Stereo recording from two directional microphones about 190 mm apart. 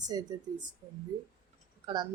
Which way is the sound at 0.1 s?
20° right (ahead or behind).